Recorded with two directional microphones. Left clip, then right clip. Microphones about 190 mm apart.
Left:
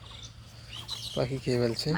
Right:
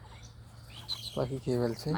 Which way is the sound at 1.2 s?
Centre (ahead or behind).